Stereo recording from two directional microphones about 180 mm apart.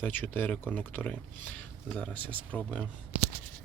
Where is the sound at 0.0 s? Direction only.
10° left (ahead or behind).